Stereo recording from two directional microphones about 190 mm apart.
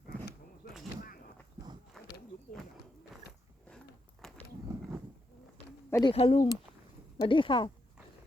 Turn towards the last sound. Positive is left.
turn(degrees=25)  # may be behind; listen again after turning